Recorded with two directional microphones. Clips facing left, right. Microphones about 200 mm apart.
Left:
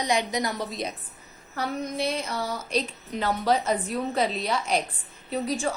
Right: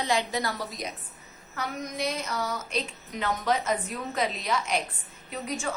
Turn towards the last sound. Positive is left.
turn(degrees=35)  # may be behind; listen again after turning